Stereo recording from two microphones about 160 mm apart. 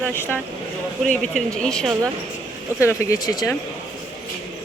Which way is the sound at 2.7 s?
15° left (ahead or behind).